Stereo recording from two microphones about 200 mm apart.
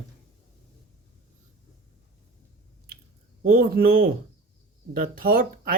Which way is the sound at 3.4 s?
45° right (ahead or behind).